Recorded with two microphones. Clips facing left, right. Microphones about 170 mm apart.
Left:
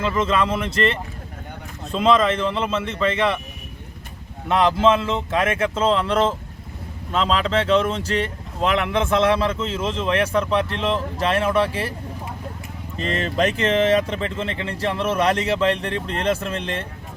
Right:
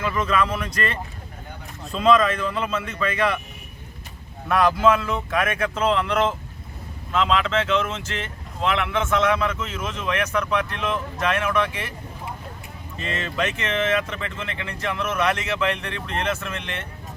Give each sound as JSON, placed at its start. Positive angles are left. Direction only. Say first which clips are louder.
{"t": 0.0, "sound": "speech", "louder": "left 2 dB", "side_deg": 25}
{"t": 4.4, "sound": "speech", "louder": "left 1 dB", "side_deg": 25}
{"t": 13.0, "sound": "speech", "louder": "left 5 dB", "side_deg": 35}